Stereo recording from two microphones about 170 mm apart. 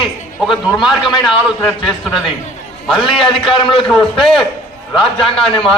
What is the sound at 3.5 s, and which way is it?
Speech, 30° left (ahead or behind).